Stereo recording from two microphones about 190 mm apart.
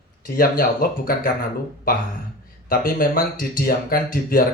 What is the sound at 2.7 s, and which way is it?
Speech, 50° left (ahead or behind).